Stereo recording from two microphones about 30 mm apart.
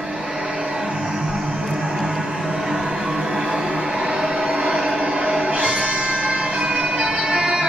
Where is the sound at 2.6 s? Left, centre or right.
Centre.